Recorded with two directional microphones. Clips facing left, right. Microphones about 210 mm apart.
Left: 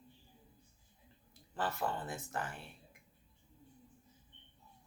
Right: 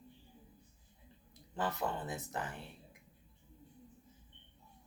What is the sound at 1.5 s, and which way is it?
Speech, 20° right (ahead or behind).